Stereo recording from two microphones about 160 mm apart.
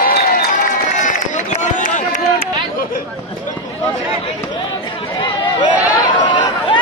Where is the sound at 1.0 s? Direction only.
50° left (ahead or behind).